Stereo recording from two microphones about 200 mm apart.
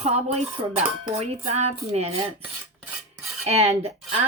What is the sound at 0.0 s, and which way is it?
Speech, 30° right (ahead or behind).